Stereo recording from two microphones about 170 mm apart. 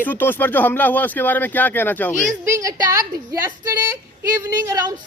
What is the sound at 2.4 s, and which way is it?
A woman's voice, 15° right (ahead or behind).